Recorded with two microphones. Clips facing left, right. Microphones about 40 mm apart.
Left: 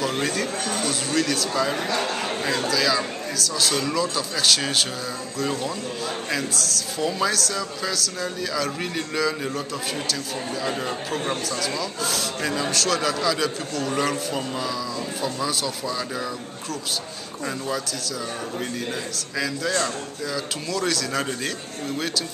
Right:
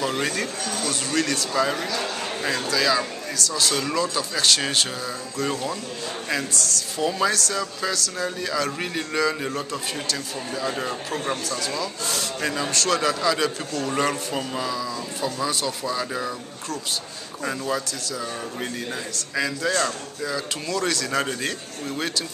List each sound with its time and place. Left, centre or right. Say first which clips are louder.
0.2 s a man's voice: left 1 dB; centre
2.0 s a man's voice: left 3 dB; centre
2.7 s a man's voice: right 3 dB; centre
6.3 s a man's voice: right 3 dB; centre
11.4 s a man's voice: left 1 dB; centre
17.5 s a man's voice: right 2 dB; centre
19.1 s a man's voice: right 1 dB; centre